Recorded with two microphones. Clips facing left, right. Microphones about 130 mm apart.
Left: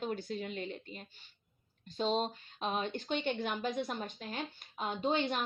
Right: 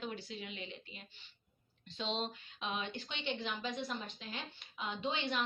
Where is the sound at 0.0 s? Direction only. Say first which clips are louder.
Left 6 dB; 45° left (ahead or behind).